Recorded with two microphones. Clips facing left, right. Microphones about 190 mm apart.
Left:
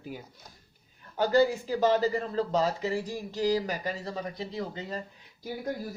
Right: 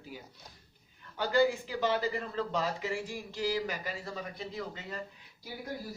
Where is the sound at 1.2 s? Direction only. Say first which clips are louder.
Left 4 dB; 40° left (ahead or behind).